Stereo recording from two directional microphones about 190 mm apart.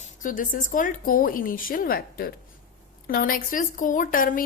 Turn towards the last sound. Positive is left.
turn(degrees=45)  # may be behind; listen again after turning